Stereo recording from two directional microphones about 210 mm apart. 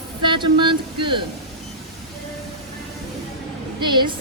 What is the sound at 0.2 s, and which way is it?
Speech, 20° right (ahead or behind).